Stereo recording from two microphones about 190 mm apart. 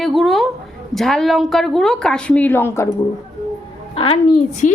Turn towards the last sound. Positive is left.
turn(degrees=40)  # may be behind; listen again after turning